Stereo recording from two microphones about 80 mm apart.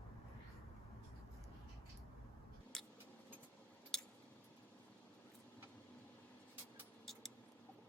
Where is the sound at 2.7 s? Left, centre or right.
Centre.